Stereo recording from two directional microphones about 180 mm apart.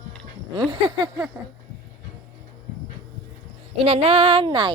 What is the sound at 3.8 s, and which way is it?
Speech, 35° right (ahead or behind).